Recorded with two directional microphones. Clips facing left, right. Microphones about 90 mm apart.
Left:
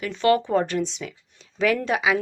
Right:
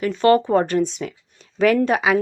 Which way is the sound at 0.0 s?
45° right (ahead or behind).